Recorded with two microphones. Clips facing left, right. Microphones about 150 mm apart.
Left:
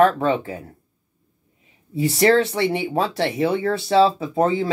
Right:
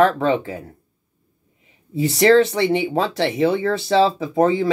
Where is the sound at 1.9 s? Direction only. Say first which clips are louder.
Right 3 dB; 20° right (ahead or behind).